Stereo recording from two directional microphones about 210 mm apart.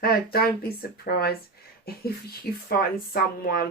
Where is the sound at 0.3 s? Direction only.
45° left (ahead or behind).